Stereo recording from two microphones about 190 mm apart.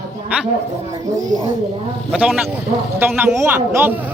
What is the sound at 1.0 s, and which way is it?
Speech, 15° right (ahead or behind).